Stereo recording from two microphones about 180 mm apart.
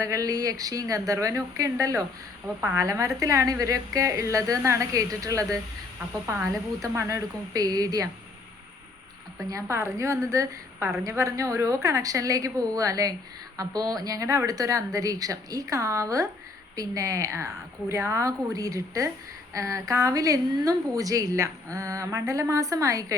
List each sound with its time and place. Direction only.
0.0 s a woman's voice: 20° right (ahead or behind)
9.4 s a woman's voice: 15° right (ahead or behind)